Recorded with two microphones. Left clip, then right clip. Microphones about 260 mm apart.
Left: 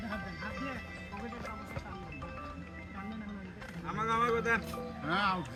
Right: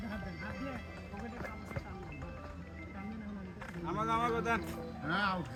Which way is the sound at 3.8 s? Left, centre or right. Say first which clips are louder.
Left 2 dB; centre.